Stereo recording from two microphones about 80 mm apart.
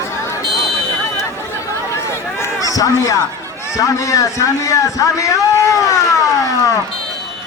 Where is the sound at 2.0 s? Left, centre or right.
Left.